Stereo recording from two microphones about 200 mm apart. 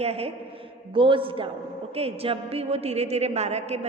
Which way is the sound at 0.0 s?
30° right (ahead or behind).